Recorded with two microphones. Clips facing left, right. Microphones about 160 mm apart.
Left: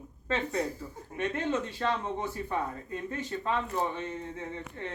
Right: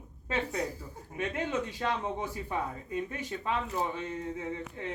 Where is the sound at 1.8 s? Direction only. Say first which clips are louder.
Left 1 dB; 10° right (ahead or behind).